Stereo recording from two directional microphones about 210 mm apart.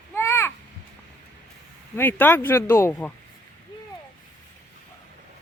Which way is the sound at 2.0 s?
10° left (ahead or behind).